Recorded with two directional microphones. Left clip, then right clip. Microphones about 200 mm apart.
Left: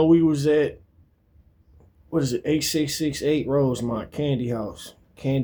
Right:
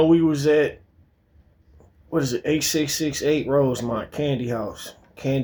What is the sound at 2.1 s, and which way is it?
Speech, 20° left (ahead or behind).